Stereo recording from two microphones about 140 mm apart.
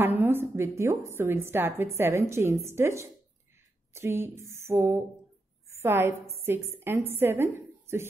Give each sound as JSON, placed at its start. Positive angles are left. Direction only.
{"t": 0.0, "sound": "a woman's voice", "side_deg": -15}
{"t": 3.9, "sound": "a sound", "side_deg": -20}
{"t": 5.7, "sound": "a woman's voice", "side_deg": -20}